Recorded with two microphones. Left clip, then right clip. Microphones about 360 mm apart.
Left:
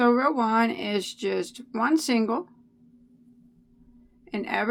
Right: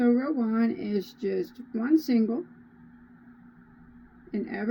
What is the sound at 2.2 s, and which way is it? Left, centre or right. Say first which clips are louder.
Speech: left 2 dB; left.